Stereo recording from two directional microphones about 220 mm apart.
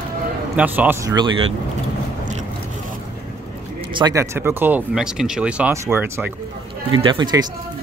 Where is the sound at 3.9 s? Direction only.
15° right (ahead or behind).